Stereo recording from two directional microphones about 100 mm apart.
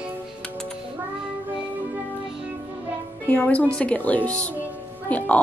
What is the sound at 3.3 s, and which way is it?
A woman's voice, 15° left (ahead or behind).